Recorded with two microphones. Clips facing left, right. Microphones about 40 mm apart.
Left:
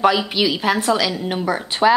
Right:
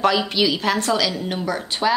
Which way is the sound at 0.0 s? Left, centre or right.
Centre.